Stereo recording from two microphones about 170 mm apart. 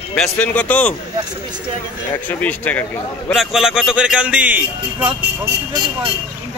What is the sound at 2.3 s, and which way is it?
A man's voice, 10° left (ahead or behind).